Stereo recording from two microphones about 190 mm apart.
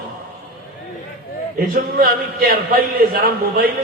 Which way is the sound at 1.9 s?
50° right (ahead or behind).